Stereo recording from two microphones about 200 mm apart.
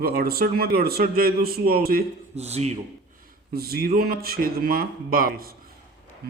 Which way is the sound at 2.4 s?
30° right (ahead or behind).